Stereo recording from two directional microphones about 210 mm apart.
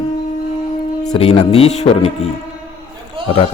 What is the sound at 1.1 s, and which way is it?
Speech, 25° left (ahead or behind).